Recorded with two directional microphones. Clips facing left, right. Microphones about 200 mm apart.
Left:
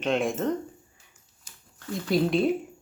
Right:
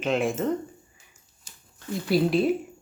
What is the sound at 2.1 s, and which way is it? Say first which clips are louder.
Speech: right 1 dB; 5° right (ahead or behind).